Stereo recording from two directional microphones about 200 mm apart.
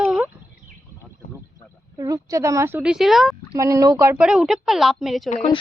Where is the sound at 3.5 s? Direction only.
15° right (ahead or behind); by 5.2 s centre (ahead or behind).